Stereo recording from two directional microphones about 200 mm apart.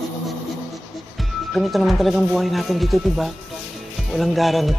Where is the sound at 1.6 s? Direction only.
Centre (ahead or behind).